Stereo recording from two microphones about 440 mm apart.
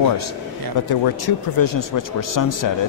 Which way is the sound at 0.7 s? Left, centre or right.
Left.